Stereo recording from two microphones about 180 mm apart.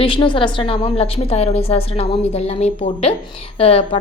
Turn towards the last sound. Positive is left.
turn(degrees=35)  # may be behind; listen again after turning